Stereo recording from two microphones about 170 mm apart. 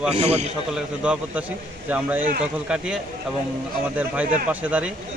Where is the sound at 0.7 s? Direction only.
5° right (ahead or behind).